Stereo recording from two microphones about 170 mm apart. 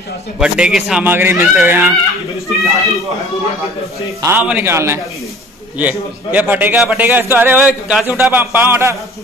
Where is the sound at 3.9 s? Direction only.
15° right (ahead or behind).